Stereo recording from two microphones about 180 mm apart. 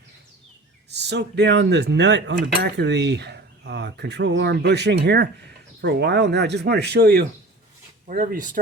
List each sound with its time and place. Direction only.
0.9 s speech: 70° right (ahead or behind); by 8.4 s 50° right (ahead or behind)